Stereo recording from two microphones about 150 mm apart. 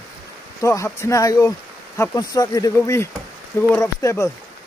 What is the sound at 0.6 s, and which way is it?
Speech, 20° left (ahead or behind).